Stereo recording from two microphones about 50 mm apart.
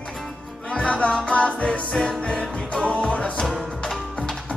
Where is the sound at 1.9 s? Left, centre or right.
Centre.